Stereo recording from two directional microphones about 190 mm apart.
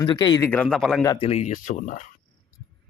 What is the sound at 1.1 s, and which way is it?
Speech, 30° left (ahead or behind).